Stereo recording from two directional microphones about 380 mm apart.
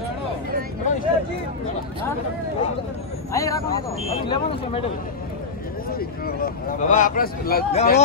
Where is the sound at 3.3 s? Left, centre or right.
Centre.